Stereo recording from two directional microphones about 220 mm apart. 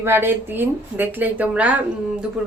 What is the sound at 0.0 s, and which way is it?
A woman's voice, 10° right (ahead or behind).